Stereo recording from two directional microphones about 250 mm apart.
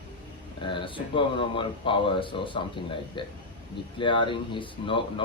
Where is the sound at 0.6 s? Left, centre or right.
Centre.